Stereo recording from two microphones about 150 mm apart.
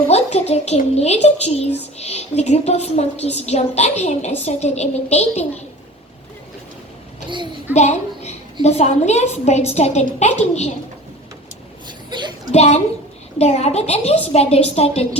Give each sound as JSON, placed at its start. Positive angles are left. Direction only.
{"t": 0.1, "sound": "a woman's voice", "side_deg": 45}
{"t": 7.3, "sound": "a child's voice", "side_deg": -30}
{"t": 7.7, "sound": "a woman's voice", "side_deg": 50}
{"t": 12.1, "sound": "speech", "side_deg": -30}
{"t": 12.5, "sound": "a woman's voice", "side_deg": 50}